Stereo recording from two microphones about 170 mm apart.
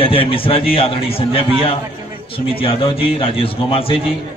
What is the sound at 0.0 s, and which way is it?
A man's voice, 30° left (ahead or behind).